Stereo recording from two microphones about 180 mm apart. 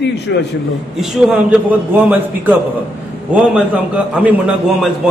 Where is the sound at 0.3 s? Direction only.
75° left (ahead or behind).